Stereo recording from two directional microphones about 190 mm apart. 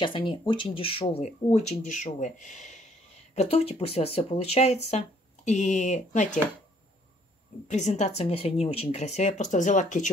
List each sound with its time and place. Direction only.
0.0 s speech: 25° left (ahead or behind)
7.6 s speech: 35° left (ahead or behind)